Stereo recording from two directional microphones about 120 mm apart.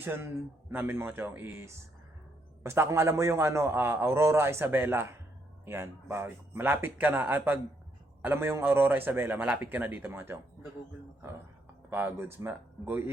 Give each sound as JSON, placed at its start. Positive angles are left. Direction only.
{"t": 0.0, "sound": "a man's voice", "side_deg": -20}
{"t": 11.9, "sound": "a man's voice", "side_deg": -15}